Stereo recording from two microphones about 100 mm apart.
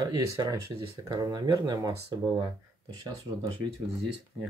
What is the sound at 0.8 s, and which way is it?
Speech, 45° right (ahead or behind).